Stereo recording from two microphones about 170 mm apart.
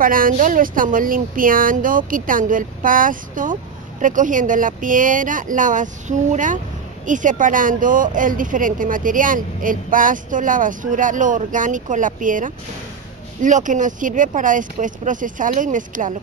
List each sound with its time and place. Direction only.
0.0 s a woman's voice: 55° right (ahead or behind)